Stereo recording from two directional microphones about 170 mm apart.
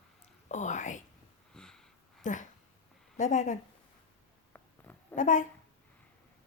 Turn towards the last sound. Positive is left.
turn(degrees=50)  # may be behind; listen again after turning